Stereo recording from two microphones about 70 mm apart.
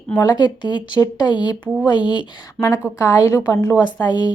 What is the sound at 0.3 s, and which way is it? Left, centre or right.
Speech, left.